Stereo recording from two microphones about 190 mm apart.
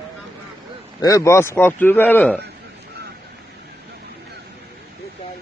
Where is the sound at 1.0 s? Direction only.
15° left (ahead or behind).